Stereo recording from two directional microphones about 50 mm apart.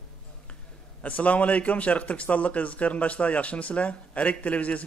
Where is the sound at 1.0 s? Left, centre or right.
Left.